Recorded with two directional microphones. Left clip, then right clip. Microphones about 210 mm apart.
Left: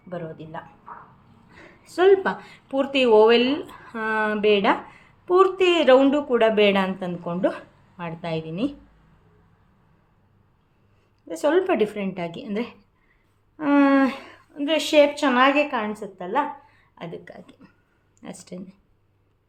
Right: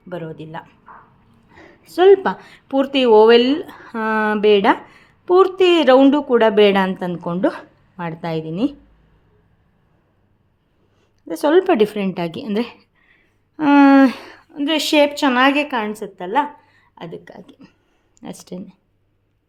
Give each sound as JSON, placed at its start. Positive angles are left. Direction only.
{"t": 0.1, "sound": "a woman's voice", "side_deg": -45}
{"t": 1.5, "sound": "speech", "side_deg": -25}
{"t": 11.2, "sound": "a woman's voice", "side_deg": -35}